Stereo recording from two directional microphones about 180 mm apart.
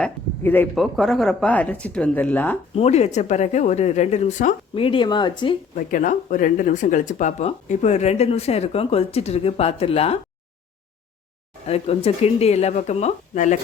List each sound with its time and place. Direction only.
0.0 s speech: 10° left (ahead or behind)
2.7 s speech: 35° left (ahead or behind)
4.7 s speech: 30° left (ahead or behind)
5.7 s speech: 45° left (ahead or behind)
11.6 s speech: 35° left (ahead or behind)